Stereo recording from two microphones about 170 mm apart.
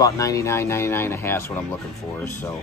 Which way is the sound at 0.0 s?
20° left (ahead or behind).